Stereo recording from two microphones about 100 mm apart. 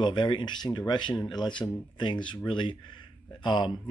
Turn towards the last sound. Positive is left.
turn(degrees=50)  # may be behind; listen again after turning